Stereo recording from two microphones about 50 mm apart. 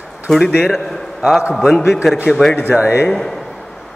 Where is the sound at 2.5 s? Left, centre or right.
Left.